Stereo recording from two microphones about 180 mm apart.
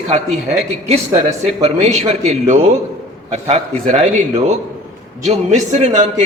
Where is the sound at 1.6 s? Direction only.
35° right (ahead or behind).